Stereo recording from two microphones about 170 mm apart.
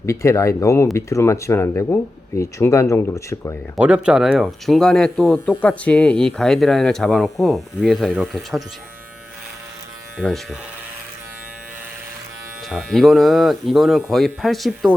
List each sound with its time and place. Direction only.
0.0 s speech: 15° left (ahead or behind)
3.8 s speech: 5° right (ahead or behind)
10.2 s speech: centre (ahead or behind)
12.6 s speech: centre (ahead or behind)